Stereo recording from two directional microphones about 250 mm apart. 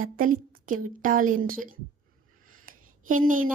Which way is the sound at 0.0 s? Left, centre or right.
Right.